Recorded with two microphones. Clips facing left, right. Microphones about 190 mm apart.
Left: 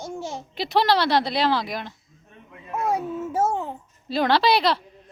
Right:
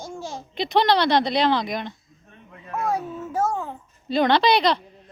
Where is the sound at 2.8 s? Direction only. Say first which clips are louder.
Left 2 dB; 25° left (ahead or behind).